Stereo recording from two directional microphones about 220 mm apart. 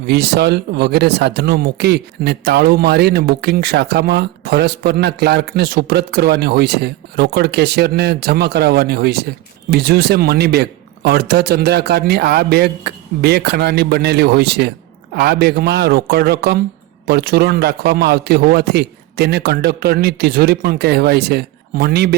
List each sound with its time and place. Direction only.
0.0 s speech: 45° right (ahead or behind)